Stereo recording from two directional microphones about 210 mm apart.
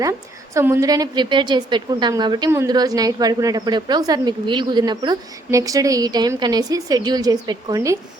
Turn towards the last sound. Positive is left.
turn(degrees=-15)  # may be behind; listen again after turning